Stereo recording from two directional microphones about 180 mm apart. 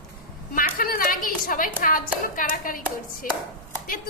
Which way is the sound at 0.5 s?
50° left (ahead or behind).